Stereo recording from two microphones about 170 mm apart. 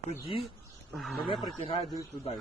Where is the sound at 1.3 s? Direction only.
30° left (ahead or behind).